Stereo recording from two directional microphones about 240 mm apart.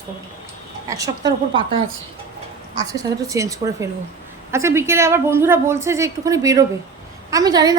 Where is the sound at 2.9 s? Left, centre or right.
Centre.